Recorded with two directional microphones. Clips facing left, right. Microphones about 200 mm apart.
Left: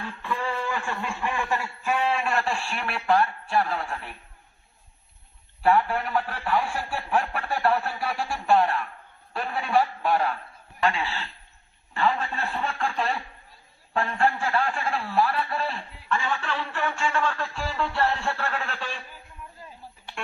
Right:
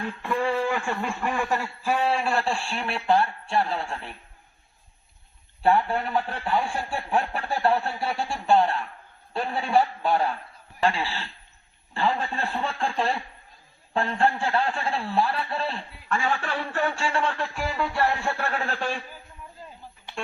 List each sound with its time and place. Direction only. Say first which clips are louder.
0.2 s speech: right 5 dB; 45° right (ahead or behind); by 4.1 s 25° right (ahead or behind)
5.6 s speech: even; 25° right (ahead or behind)
16.1 s a man's voice: right 1 dB; 45° right (ahead or behind)